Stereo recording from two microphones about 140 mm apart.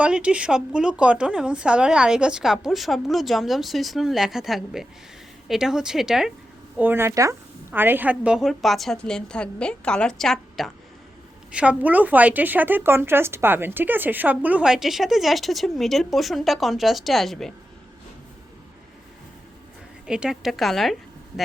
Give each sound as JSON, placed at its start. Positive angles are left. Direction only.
{"t": 0.0, "sound": "speech", "side_deg": -10}
{"t": 6.7, "sound": "speech", "side_deg": -15}
{"t": 11.5, "sound": "speech", "side_deg": -10}
{"t": 20.1, "sound": "speech", "side_deg": -5}